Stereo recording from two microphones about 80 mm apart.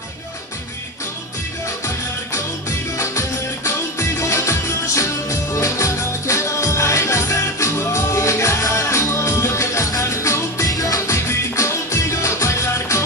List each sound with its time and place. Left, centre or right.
3.0 s music: left